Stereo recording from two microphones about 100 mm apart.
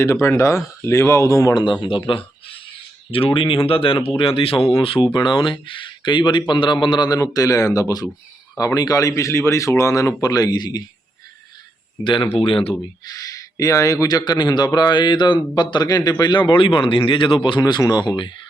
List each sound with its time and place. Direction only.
0.0 s speech: 25° left (ahead or behind)
1.5 s speech: 50° left (ahead or behind); by 5.0 s 70° left (ahead or behind)
5.1 s a man's voice: 50° left (ahead or behind)
12.0 s speech: 55° left (ahead or behind)
13.1 s a man's voice: 35° left (ahead or behind); by 17.6 s 55° left (ahead or behind)
17.6 s speech: 40° left (ahead or behind)